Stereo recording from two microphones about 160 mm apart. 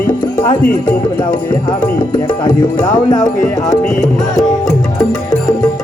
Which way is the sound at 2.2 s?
25° left (ahead or behind).